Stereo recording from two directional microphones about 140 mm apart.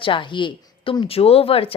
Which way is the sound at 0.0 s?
35° left (ahead or behind).